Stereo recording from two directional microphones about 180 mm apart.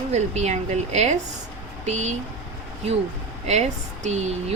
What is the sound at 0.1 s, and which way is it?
Speech, 40° right (ahead or behind).